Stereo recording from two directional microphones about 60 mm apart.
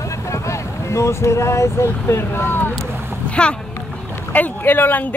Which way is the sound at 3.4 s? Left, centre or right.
Centre.